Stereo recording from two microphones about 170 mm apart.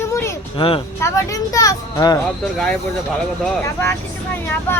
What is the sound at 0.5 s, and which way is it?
Speech, 30° left (ahead or behind).